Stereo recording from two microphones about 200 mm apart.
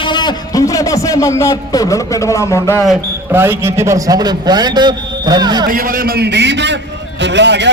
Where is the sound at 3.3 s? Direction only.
10° right (ahead or behind).